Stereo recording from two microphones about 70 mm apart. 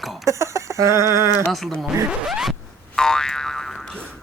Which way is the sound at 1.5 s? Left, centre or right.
Centre.